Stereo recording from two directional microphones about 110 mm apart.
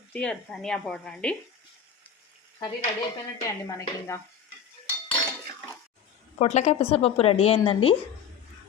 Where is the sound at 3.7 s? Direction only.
25° left (ahead or behind).